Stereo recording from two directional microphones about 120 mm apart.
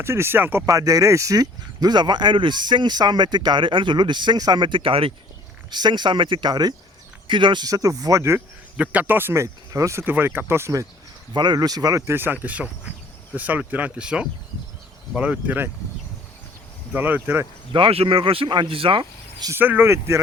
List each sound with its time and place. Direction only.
0.0 s speech: 20° right (ahead or behind)
0.6 s speech: 30° right (ahead or behind); by 5.1 s 50° right (ahead or behind)
5.7 s speech: 35° right (ahead or behind)
8.7 s speech: 10° right (ahead or behind)
11.3 s speech: 35° right (ahead or behind); by 15.7 s 15° right (ahead or behind)
16.9 s speech: 15° right (ahead or behind)
17.7 s speech: 45° right (ahead or behind)
19.5 s speech: 15° right (ahead or behind)